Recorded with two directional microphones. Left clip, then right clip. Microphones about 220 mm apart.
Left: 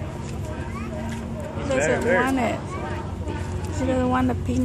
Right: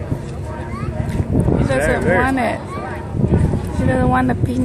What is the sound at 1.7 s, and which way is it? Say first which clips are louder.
Speech: right 3 dB; 35° right (ahead or behind).